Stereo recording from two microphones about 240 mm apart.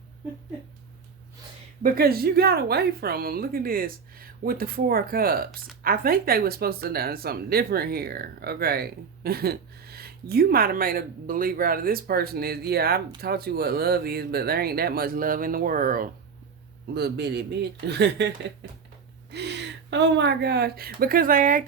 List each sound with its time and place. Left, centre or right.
1.8 s a man's voice: right
19.3 s speech: right